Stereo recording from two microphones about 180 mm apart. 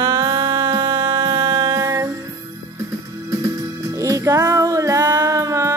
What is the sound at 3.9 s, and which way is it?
Music, 20° right (ahead or behind).